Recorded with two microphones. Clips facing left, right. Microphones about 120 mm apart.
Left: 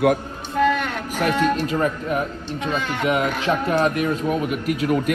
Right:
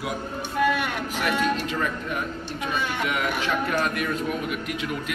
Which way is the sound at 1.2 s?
40° left (ahead or behind).